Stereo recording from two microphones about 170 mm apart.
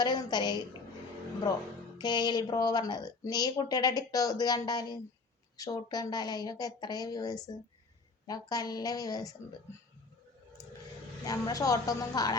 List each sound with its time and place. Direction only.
0.0 s speech: 25° left (ahead or behind)
2.0 s speech: 25° left (ahead or behind)
11.3 s speech: 20° left (ahead or behind)